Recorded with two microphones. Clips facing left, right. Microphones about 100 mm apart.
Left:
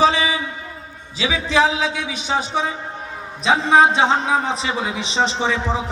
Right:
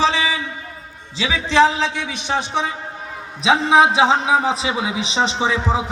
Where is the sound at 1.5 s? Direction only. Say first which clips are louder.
Right 3 dB; 5° left (ahead or behind).